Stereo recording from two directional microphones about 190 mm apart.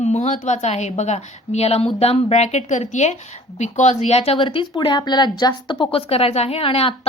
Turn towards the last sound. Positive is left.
turn(degrees=30)  # may be behind; listen again after turning